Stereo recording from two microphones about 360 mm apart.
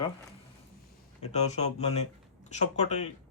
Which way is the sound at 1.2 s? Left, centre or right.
Centre.